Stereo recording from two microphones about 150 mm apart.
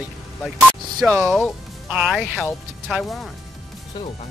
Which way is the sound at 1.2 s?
Centre (ahead or behind).